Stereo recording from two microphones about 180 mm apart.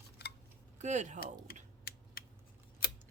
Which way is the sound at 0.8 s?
40° right (ahead or behind).